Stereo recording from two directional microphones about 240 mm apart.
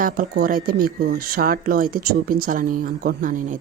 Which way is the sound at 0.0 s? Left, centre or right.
Right.